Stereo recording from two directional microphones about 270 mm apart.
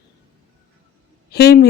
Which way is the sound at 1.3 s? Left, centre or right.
Left.